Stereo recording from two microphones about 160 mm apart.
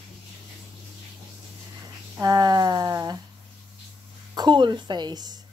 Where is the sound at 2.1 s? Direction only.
25° right (ahead or behind).